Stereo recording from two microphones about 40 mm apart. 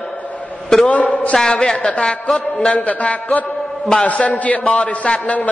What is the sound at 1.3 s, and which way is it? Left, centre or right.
A man's voice, centre.